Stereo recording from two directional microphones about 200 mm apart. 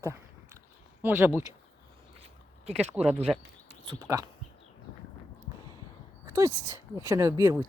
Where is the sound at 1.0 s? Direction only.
10° right (ahead or behind).